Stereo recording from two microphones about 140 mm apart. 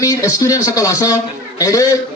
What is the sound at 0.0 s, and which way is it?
Speech, 20° left (ahead or behind).